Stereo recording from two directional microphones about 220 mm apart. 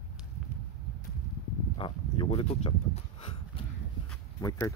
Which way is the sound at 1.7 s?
25° left (ahead or behind).